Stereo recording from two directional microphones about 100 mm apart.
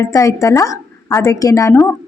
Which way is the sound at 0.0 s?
35° left (ahead or behind).